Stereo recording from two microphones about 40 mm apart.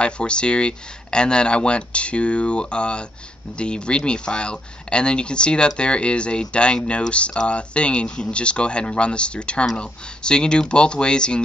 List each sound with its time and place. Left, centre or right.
0.0 s speech: left